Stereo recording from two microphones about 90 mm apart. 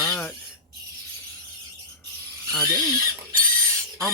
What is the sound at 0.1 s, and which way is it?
Squeal, 15° left (ahead or behind).